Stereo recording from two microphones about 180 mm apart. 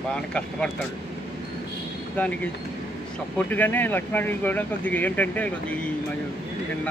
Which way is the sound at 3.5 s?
10° left (ahead or behind).